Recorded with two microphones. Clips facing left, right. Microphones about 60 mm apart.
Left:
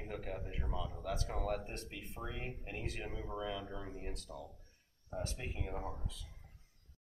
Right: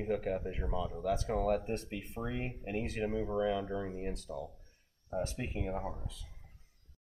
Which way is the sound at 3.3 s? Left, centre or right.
Right.